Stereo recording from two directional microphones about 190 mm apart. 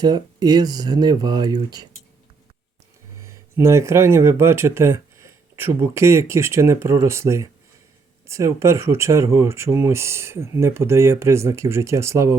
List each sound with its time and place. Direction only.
0.0 s speech: 20° right (ahead or behind)
3.2 s speech: 15° right (ahead or behind)